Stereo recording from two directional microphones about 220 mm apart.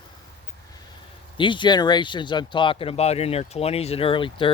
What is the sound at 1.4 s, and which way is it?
Speech, 20° left (ahead or behind).